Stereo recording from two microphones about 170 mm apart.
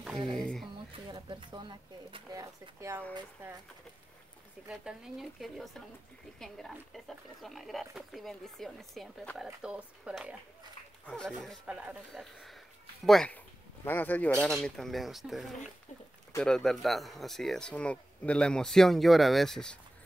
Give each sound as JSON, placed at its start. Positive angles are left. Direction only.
{"t": 0.3, "sound": "speech", "side_deg": 0}
{"t": 1.0, "sound": "speech", "side_deg": -25}
{"t": 4.6, "sound": "speech", "side_deg": -5}
{"t": 11.1, "sound": "speech", "side_deg": 5}
{"t": 11.6, "sound": "speech", "side_deg": -5}